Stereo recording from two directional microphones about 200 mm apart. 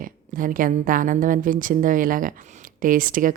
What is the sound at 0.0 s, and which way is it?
A woman's voice, 45° right (ahead or behind).